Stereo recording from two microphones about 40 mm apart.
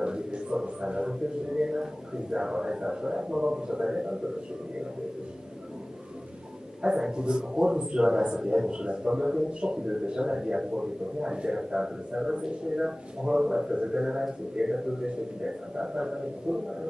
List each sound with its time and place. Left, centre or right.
0.0 s a sound: right
1.6 s a man's voice: centre
6.8 s a man's voice: centre